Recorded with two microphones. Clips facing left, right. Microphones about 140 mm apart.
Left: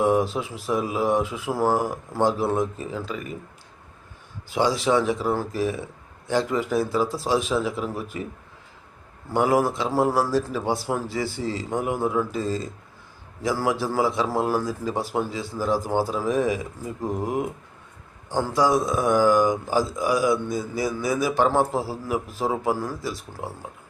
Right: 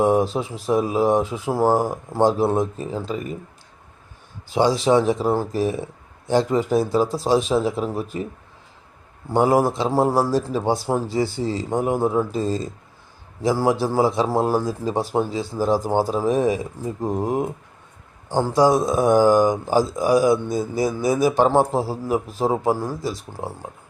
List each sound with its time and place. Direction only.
0.0 s a man's voice: 35° right (ahead or behind)
4.5 s a man's voice: 30° right (ahead or behind)
9.3 s a man's voice: 30° right (ahead or behind)